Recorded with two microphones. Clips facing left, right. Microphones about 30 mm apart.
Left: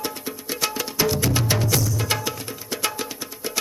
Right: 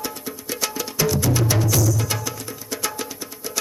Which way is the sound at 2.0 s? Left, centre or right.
Centre.